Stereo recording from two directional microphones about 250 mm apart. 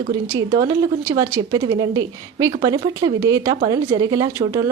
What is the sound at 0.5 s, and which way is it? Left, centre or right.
A woman's voice, centre.